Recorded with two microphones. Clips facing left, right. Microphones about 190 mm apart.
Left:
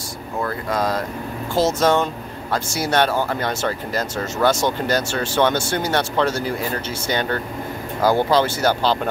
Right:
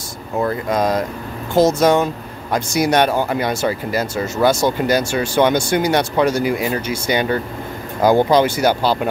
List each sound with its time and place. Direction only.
0.4 s speech: 20° right (ahead or behind)